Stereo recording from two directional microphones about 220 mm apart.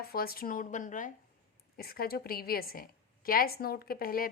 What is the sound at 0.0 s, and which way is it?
A woman's voice, 45° left (ahead or behind).